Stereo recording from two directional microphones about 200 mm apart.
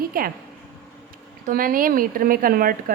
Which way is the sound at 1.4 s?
45° right (ahead or behind).